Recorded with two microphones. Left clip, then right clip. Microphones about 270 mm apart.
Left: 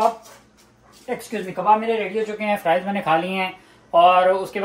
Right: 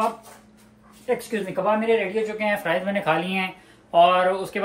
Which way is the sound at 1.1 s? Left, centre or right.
Centre.